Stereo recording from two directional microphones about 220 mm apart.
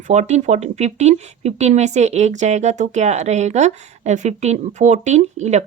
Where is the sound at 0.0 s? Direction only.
30° right (ahead or behind).